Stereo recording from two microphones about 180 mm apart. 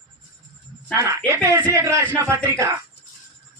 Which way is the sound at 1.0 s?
15° right (ahead or behind).